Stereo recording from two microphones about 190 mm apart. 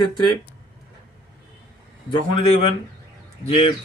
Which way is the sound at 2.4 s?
30° left (ahead or behind).